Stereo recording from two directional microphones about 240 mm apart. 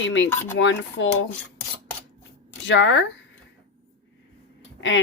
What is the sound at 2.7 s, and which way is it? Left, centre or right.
Speech, left.